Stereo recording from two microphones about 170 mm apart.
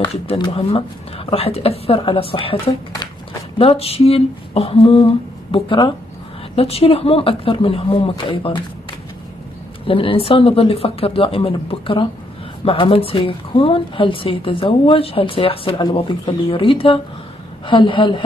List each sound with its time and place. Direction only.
0.1 s a woman's voice: 35° left (ahead or behind)
2.5 s a woman's voice: 20° left (ahead or behind)
3.5 s a woman's voice: 35° left (ahead or behind)
9.8 s a woman's voice: 30° left (ahead or behind)